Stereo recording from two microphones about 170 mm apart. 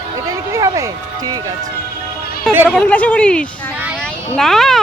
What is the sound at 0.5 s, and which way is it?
Speech, 20° right (ahead or behind).